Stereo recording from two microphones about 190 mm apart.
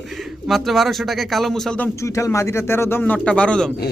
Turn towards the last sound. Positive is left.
turn(degrees=5)  # may be behind; listen again after turning